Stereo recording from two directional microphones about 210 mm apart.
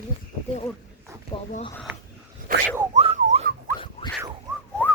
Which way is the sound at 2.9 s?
30° right (ahead or behind).